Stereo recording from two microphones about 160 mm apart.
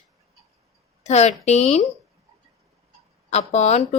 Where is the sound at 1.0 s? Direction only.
45° left (ahead or behind).